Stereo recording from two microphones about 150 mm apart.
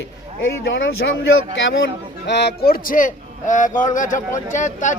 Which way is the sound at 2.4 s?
90° left.